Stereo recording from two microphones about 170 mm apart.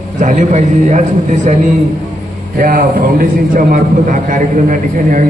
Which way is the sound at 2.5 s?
55° right (ahead or behind).